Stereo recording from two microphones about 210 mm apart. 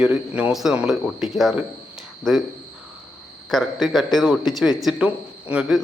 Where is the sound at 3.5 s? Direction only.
Centre (ahead or behind).